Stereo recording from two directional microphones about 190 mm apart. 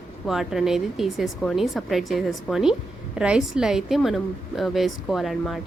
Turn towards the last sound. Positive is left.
turn(degrees=0)  # may be behind; listen again after turning